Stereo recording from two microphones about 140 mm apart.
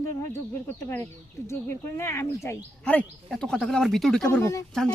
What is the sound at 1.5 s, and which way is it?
Speech, 20° left (ahead or behind).